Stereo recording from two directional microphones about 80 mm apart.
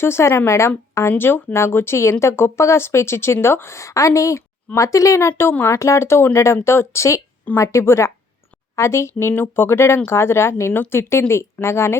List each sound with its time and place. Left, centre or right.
0.0 s speech: left